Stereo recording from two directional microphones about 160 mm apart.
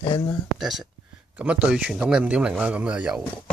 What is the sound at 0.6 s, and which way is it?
Speech, centre (ahead or behind).